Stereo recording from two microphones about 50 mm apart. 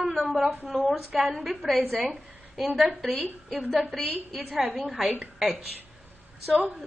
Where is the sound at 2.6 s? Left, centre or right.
Centre.